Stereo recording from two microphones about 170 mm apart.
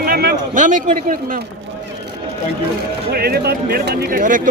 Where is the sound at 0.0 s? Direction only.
65° right (ahead or behind).